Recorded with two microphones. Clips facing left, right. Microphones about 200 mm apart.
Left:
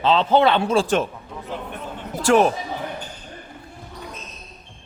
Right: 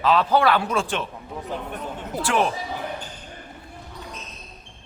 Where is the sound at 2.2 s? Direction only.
45° left (ahead or behind).